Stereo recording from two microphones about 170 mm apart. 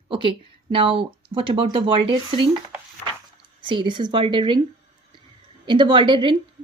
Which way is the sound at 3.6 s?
30° right (ahead or behind).